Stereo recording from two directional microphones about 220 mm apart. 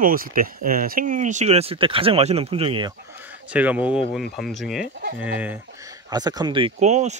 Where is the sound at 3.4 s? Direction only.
5° right (ahead or behind); by 7.2 s 30° right (ahead or behind).